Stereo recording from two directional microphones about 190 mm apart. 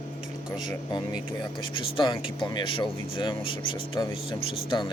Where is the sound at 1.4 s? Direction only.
25° left (ahead or behind).